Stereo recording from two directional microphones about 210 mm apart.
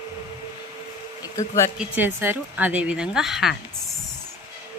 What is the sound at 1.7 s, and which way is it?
Speech, 10° right (ahead or behind).